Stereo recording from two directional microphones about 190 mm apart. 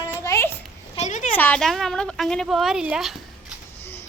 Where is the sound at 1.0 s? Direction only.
40° left (ahead or behind).